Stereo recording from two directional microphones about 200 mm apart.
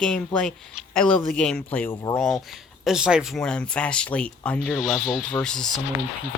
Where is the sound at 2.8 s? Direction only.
5° right (ahead or behind).